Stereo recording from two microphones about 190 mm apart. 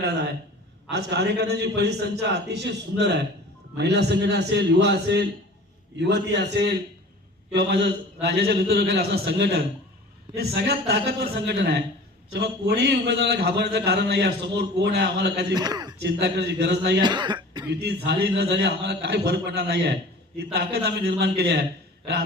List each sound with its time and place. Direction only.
0.9 s a man's voice: 65° right (ahead or behind)
15.5 s a man's voice: 20° right (ahead or behind)
16.0 s a man's voice: 60° right (ahead or behind)
17.0 s speech: 25° right (ahead or behind)
17.7 s a man's voice: 60° right (ahead or behind)